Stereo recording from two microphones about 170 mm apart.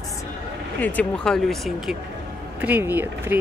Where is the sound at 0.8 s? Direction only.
5° left (ahead or behind).